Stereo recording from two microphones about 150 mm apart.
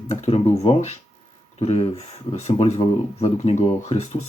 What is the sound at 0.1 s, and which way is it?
Speech, 45° left (ahead or behind).